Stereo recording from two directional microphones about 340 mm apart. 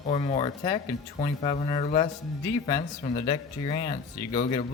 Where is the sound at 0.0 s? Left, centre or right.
Centre.